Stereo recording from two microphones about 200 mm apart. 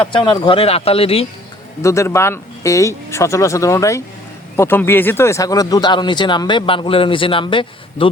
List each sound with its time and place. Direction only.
0.0 s speech: 25° left (ahead or behind)
1.8 s speech: 15° left (ahead or behind)